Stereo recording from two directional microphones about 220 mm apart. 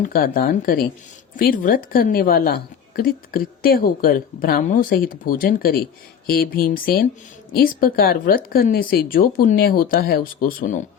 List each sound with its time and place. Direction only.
0.0 s a woman's voice: 40° left (ahead or behind)